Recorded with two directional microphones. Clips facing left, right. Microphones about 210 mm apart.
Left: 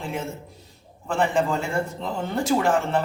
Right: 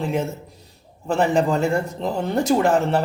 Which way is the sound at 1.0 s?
40° right (ahead or behind).